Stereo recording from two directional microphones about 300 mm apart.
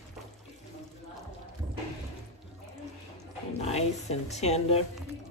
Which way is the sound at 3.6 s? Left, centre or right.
Left.